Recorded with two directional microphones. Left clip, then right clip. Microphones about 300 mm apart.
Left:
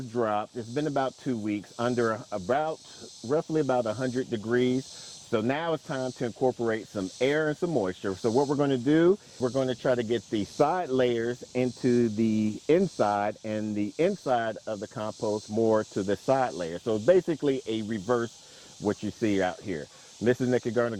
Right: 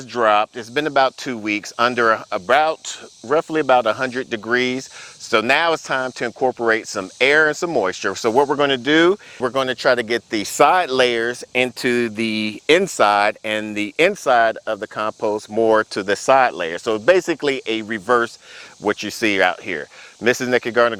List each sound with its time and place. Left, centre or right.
0.1 s speech: centre
6.4 s speech: centre
6.7 s speech: centre